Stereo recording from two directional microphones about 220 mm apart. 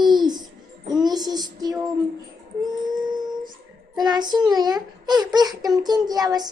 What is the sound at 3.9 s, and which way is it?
A child's voice, 20° right (ahead or behind).